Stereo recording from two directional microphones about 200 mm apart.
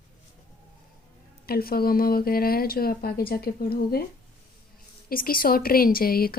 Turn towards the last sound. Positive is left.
turn(degrees=50)  # may be behind; listen again after turning